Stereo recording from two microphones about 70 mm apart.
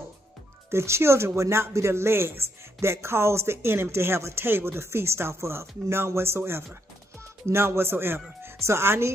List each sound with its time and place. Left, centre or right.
0.7 s speech: right